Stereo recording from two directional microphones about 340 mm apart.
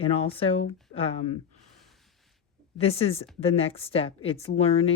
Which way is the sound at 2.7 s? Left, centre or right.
Centre.